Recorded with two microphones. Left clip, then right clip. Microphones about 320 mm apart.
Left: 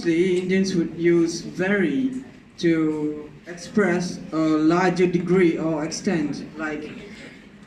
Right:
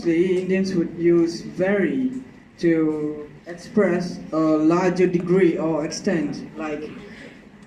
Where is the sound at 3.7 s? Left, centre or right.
Centre.